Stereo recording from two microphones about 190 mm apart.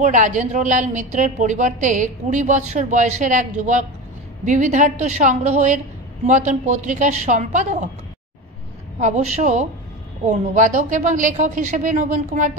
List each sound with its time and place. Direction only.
0.0 s a woman's voice: 40° right (ahead or behind)
4.5 s a woman's voice: 40° right (ahead or behind)
9.0 s a woman's voice: 40° right (ahead or behind)